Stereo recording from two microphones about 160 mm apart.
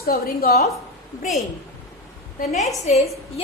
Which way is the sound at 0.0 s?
70° left (ahead or behind).